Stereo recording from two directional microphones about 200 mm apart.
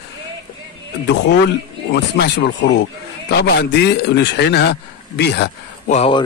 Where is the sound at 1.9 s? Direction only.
55° left (ahead or behind).